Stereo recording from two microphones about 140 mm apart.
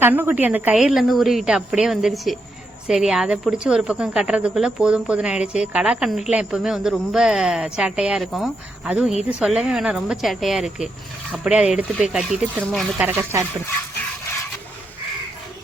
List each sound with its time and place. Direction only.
0.0 s a woman's voice: 15° right (ahead or behind)
13.0 s speech: 15° right (ahead or behind)